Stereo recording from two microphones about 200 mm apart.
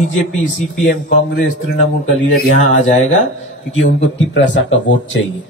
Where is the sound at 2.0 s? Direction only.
70° left (ahead or behind).